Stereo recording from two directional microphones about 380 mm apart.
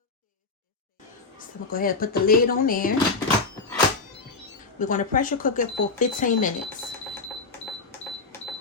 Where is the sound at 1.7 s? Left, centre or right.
Left.